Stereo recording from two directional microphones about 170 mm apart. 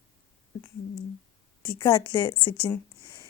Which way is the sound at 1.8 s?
30° left (ahead or behind).